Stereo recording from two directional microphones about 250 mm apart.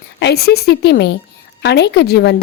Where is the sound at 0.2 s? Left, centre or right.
Left.